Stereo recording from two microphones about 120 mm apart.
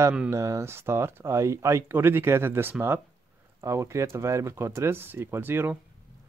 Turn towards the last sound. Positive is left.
turn(degrees=-15)  # may be behind; listen again after turning